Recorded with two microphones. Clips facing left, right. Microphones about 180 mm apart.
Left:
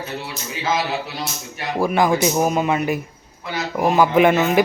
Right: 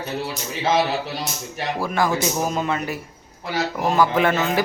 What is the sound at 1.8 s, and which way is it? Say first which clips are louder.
Speech: left 5 dB; 15° left (ahead or behind).